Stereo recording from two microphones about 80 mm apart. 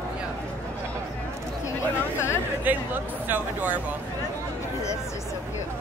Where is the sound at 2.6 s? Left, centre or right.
Right.